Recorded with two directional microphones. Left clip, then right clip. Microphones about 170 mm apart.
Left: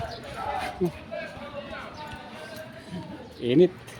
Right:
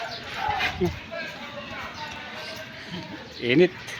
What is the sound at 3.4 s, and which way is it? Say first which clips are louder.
Speech: right 1 dB; 20° left (ahead or behind).